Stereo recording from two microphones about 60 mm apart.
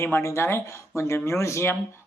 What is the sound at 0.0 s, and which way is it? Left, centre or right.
Speech, left.